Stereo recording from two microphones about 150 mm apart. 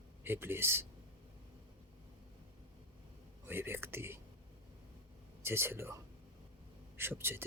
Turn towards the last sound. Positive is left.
turn(degrees=-15)  # may be behind; listen again after turning